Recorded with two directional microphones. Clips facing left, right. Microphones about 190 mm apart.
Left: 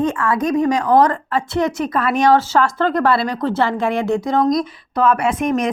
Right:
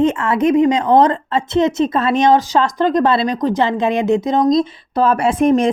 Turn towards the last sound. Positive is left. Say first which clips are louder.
# right 5 dB
turn(degrees=-30)  # may be behind; listen again after turning